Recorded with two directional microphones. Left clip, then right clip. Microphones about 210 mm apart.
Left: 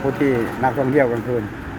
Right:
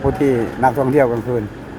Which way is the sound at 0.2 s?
20° right (ahead or behind).